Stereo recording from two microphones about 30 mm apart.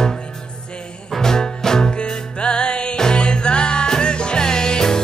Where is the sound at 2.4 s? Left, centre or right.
Left.